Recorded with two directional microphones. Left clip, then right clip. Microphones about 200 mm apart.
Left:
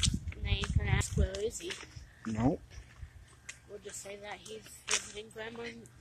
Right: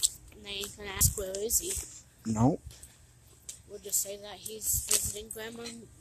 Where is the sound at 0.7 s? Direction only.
65° right (ahead or behind).